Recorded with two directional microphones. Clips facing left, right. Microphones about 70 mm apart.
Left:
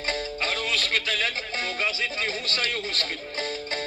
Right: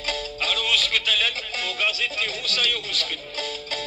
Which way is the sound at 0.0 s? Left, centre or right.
Left.